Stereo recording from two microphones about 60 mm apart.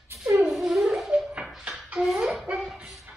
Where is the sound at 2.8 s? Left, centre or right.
Centre.